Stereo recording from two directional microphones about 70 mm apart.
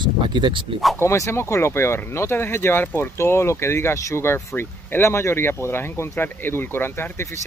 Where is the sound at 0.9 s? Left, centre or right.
Left.